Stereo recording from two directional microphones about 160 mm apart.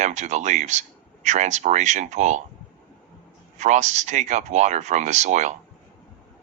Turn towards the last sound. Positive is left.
turn(degrees=-45)  # may be behind; listen again after turning